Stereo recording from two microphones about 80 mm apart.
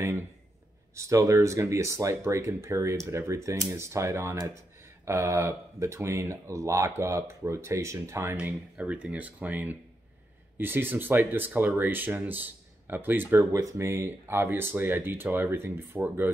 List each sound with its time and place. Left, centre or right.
0.9 s speech: right
8.7 s speech: centre
13.5 s speech: right